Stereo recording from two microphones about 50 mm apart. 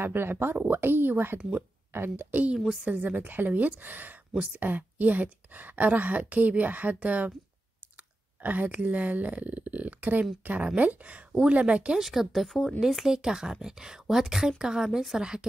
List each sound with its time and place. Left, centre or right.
0.0 s speech: right
2.8 s a woman's voice: right
4.3 s speech: centre
4.6 s a woman's voice: right
8.4 s a woman's voice: right
12.0 s a woman's voice: centre